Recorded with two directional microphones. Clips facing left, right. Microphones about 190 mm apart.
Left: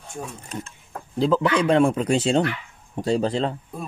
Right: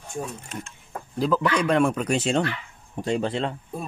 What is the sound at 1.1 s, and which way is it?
Speech, 25° left (ahead or behind).